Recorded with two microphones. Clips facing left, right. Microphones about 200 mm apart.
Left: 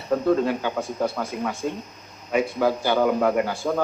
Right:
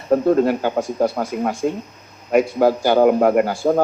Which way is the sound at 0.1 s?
40° right (ahead or behind).